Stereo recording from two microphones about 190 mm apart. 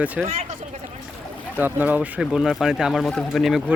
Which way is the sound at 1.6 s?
10° right (ahead or behind).